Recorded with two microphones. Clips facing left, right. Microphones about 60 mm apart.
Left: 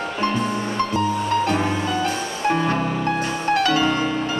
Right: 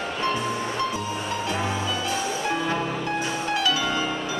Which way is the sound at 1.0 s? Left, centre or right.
Left.